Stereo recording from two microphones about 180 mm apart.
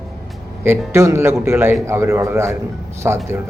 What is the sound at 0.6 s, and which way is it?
A man's voice, 15° right (ahead or behind).